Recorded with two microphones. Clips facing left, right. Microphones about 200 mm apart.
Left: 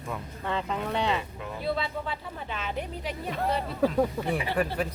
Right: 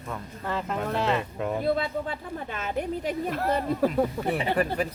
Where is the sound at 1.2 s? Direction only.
55° right (ahead or behind).